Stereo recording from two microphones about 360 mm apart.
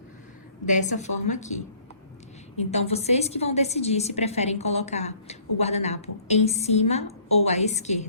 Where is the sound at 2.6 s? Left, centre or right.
Centre.